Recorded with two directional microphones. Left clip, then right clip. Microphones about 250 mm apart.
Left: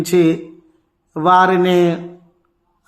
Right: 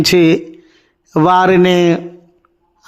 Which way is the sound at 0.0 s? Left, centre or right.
Right.